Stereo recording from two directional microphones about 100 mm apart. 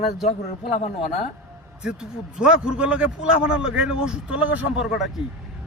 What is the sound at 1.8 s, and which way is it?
A man's voice, 10° right (ahead or behind).